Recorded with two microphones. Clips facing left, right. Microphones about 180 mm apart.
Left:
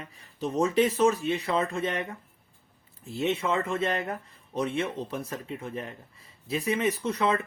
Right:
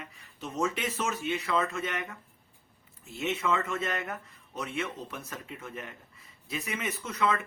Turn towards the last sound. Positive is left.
turn(degrees=30)  # may be behind; listen again after turning